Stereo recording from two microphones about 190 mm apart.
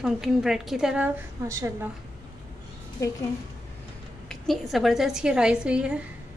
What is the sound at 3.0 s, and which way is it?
Speech, 15° left (ahead or behind).